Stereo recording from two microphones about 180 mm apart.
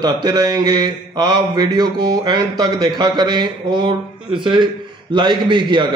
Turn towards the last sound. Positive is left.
turn(degrees=-25)  # may be behind; listen again after turning